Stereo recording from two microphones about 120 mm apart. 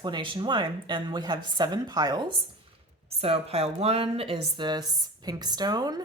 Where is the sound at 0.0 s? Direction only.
40° right (ahead or behind).